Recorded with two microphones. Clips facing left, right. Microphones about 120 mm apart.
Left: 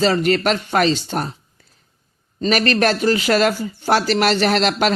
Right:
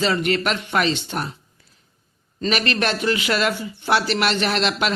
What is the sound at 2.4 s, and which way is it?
A man's voice, 40° left (ahead or behind).